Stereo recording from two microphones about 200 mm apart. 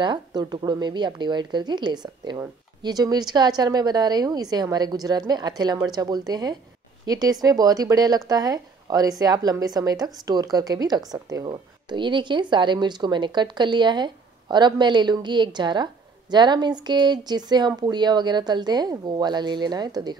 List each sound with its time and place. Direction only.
0.0 s speech: 20° right (ahead or behind)